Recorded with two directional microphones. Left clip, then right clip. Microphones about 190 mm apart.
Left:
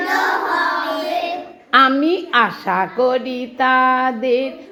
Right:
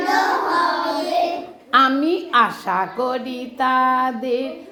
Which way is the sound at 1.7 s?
25° left (ahead or behind).